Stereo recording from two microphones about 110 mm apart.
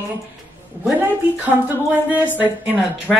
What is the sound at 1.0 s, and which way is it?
Speech, 15° right (ahead or behind).